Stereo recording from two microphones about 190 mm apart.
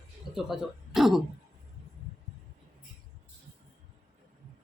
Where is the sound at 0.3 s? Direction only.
Centre (ahead or behind).